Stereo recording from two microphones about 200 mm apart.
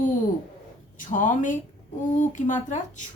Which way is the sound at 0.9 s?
40° left (ahead or behind).